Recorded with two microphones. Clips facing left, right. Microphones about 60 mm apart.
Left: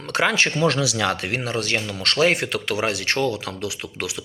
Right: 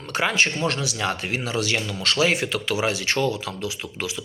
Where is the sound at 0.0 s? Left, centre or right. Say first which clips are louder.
Left 2 dB; left.